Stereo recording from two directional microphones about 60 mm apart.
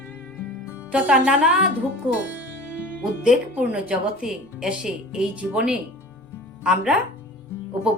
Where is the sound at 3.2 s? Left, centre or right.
Centre.